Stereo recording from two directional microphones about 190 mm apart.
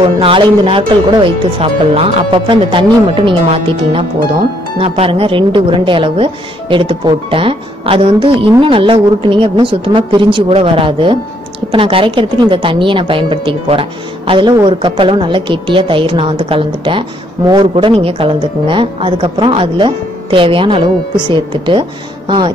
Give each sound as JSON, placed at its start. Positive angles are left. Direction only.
{"t": 0.2, "sound": "a woman's voice", "side_deg": -30}